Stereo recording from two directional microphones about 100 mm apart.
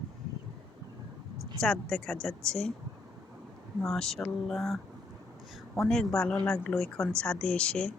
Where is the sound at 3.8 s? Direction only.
5° left (ahead or behind).